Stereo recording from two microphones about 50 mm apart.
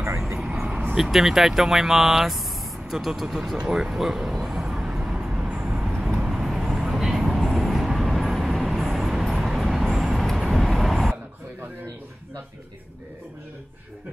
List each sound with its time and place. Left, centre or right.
0.3 s vehicle: centre
0.9 s speech: centre
3.5 s speech: centre
4.0 s speech: centre
4.4 s vehicle: centre
5.9 s vehicle: centre